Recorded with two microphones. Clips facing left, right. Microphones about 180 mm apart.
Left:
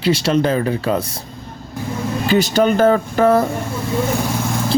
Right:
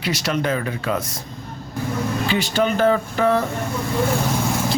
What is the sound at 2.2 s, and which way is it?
Speech, 40° left (ahead or behind).